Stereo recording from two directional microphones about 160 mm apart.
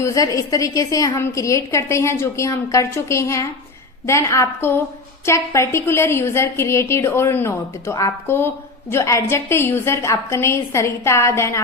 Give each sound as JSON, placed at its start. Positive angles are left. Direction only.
{"t": 0.0, "sound": "a woman's voice", "side_deg": 20}